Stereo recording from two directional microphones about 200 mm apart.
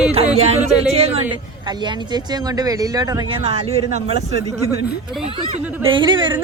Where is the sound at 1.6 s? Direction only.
20° right (ahead or behind).